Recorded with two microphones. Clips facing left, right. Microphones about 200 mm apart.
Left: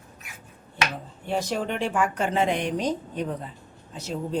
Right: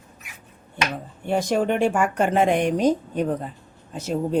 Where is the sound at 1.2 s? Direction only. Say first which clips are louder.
Right 6 dB; 50° right (ahead or behind).